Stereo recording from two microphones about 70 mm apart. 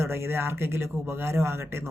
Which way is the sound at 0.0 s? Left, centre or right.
Right.